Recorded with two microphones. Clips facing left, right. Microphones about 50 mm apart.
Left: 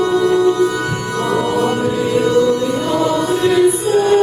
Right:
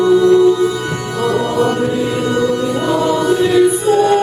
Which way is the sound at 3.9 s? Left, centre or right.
Right.